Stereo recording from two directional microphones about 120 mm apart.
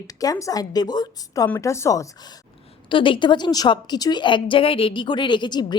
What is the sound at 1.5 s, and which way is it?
Speech, 25° left (ahead or behind).